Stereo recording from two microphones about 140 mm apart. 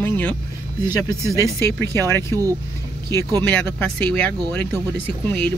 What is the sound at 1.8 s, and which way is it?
Speech, 20° left (ahead or behind).